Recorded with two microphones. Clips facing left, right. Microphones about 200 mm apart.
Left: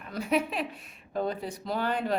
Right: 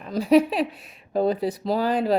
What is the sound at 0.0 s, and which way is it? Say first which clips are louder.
Speech: right 10 dB; 35° right (ahead or behind).